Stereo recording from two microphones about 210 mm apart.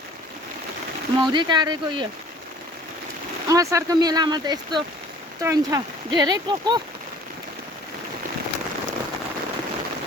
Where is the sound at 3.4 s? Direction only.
15° right (ahead or behind).